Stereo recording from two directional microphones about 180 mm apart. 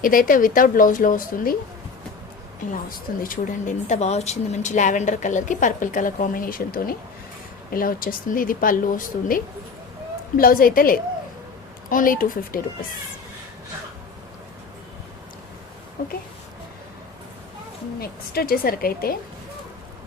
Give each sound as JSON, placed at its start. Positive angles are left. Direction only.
{"t": 0.0, "sound": "a woman's voice", "side_deg": 50}
{"t": 3.2, "sound": "a woman's voice", "side_deg": 40}
{"t": 16.0, "sound": "a woman's voice", "side_deg": 55}
{"t": 18.0, "sound": "a woman's voice", "side_deg": 55}